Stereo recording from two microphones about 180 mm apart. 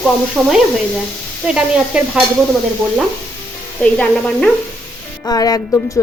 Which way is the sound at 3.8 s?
5° left (ahead or behind).